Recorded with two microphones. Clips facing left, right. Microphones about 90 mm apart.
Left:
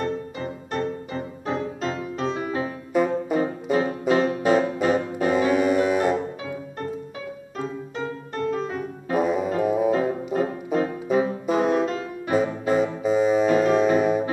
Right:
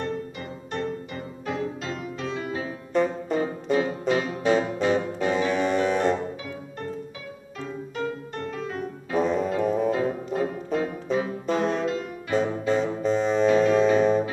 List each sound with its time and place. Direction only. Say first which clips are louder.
0.4 s music: left 3 dB; 35° left (ahead or behind)
2.9 s music: left 2 dB; 10° left (ahead or behind)
9.1 s music: left 2 dB; 5° left (ahead or behind)
10.7 s brass instrument: left 3 dB; 10° left (ahead or behind)
11.1 s music: left 4 dB; 10° left (ahead or behind)